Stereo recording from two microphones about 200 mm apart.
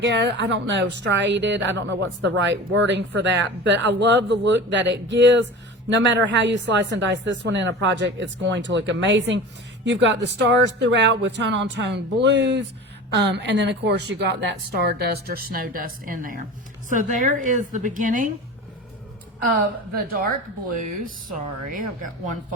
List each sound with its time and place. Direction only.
0.0 s a woman's voice: 60° right (ahead or behind); by 18.3 s 45° right (ahead or behind)
19.5 s a woman's voice: 45° right (ahead or behind)